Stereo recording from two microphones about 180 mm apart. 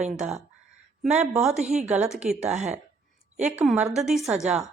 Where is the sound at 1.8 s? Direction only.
5° right (ahead or behind).